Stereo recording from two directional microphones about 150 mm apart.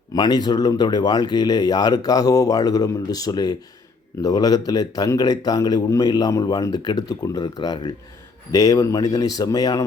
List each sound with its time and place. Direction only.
0.1 s a man's voice: 25° left (ahead or behind)